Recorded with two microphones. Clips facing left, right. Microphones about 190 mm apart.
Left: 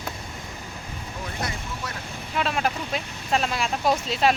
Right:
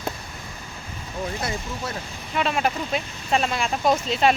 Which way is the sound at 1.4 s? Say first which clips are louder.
Right 3 dB; 25° right (ahead or behind).